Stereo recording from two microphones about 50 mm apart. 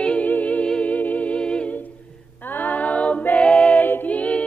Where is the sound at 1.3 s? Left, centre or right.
Left.